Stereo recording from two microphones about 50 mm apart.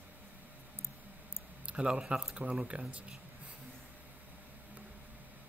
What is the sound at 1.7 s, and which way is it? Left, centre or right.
Speech, right.